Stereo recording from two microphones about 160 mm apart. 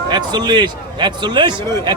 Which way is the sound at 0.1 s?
25° right (ahead or behind).